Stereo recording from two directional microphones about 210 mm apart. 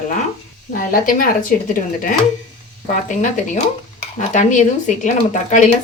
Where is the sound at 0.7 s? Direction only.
40° left (ahead or behind).